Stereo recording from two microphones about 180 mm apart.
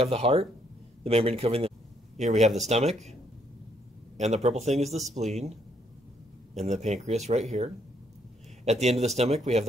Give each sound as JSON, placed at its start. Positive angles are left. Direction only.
{"t": 0.0, "sound": "speech", "side_deg": -35}
{"t": 4.2, "sound": "speech", "side_deg": -40}
{"t": 6.5, "sound": "speech", "side_deg": -40}
{"t": 8.6, "sound": "speech", "side_deg": -40}